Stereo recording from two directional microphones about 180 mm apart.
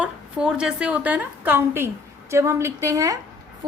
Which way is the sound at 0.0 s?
5° right (ahead or behind).